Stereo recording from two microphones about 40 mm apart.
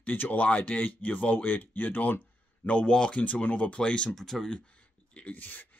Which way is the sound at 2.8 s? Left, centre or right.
Left.